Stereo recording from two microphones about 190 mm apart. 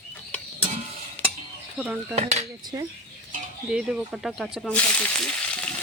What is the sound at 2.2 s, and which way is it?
Dishes, 35° right (ahead or behind).